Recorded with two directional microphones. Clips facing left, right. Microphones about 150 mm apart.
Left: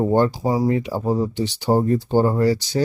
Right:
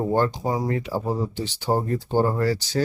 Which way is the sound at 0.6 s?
20° left (ahead or behind).